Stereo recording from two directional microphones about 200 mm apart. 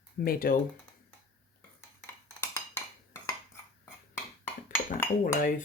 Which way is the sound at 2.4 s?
15° left (ahead or behind).